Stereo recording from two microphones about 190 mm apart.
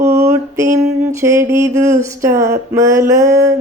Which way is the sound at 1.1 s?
15° right (ahead or behind).